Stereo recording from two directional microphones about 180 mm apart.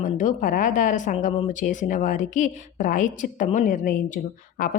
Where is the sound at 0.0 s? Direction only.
45° left (ahead or behind).